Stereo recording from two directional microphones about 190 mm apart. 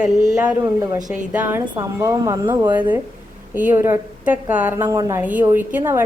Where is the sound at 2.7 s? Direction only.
10° right (ahead or behind).